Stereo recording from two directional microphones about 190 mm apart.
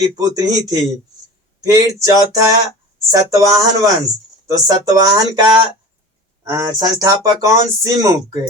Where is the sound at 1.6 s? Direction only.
20° right (ahead or behind).